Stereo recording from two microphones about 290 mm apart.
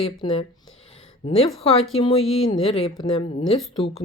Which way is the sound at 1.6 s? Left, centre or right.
Left.